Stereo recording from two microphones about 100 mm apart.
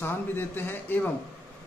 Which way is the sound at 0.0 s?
20° left (ahead or behind).